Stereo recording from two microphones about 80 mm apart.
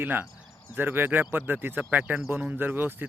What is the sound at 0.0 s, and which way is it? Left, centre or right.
Speech, right.